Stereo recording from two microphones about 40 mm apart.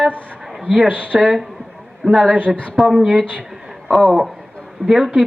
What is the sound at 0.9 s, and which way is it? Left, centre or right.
Speech, right.